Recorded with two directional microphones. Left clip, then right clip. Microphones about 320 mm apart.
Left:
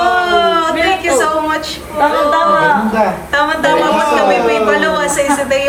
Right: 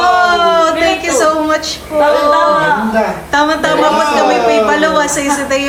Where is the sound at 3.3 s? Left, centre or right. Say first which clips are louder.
Right 2 dB; centre.